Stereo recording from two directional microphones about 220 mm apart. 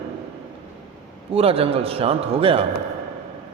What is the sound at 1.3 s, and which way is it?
A man's voice, 25° right (ahead or behind).